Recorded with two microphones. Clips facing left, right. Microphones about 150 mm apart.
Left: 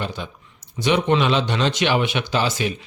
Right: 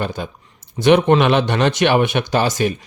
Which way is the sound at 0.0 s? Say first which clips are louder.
Right 5 dB; 45° right (ahead or behind).